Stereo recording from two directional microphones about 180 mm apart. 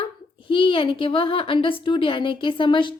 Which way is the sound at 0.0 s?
30° left (ahead or behind).